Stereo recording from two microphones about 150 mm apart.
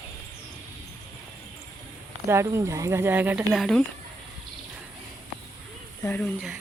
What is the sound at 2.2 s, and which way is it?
Speech, 20° right (ahead or behind).